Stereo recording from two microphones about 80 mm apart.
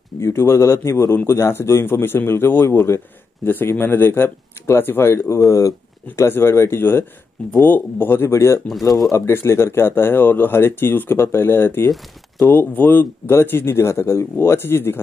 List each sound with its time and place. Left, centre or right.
0.2 s a man's voice: left
6.1 s a man's voice: left